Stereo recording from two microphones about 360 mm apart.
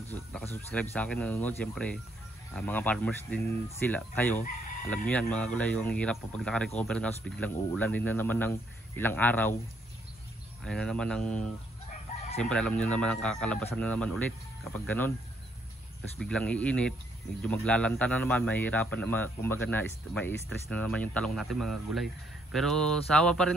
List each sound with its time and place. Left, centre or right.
0.1 s speech: centre
10.6 s speech: centre
11.9 s chicken: centre
12.4 s speech: centre
16.2 s speech: centre